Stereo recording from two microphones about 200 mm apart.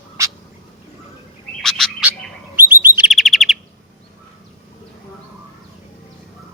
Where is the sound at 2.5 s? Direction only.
10° right (ahead or behind).